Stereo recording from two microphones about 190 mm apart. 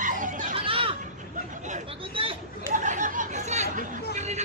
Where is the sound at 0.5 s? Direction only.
30° right (ahead or behind).